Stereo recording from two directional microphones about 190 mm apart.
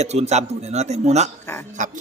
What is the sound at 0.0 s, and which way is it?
A man's voice, 35° right (ahead or behind).